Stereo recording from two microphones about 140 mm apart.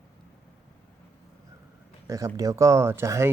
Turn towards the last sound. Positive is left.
turn(degrees=-20)  # may be behind; listen again after turning